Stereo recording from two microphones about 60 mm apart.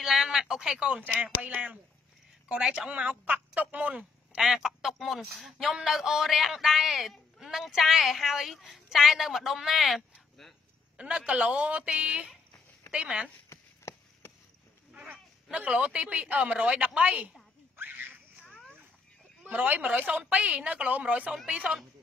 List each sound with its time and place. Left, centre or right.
0.0 s a woman's voice: centre; by 4.4 s right
4.4 s speech: centre
11.0 s a woman's voice: centre
13.5 s chop: left
15.5 s a woman's voice: centre
17.7 s a sound: right
18.4 s a sound: centre
19.4 s a woman's voice: right